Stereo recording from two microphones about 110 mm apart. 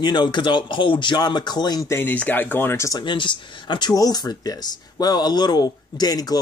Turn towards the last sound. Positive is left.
turn(degrees=35)  # may be behind; listen again after turning